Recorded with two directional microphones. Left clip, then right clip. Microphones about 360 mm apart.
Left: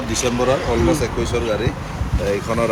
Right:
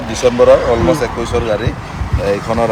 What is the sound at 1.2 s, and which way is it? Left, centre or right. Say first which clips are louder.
Speech: right 5 dB; right.